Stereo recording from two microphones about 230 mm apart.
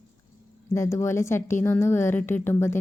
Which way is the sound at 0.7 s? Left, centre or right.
Centre.